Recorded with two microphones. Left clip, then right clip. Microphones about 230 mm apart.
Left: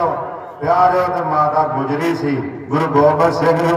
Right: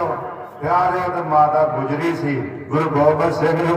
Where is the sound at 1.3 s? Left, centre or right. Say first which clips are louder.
Right 4 dB; left.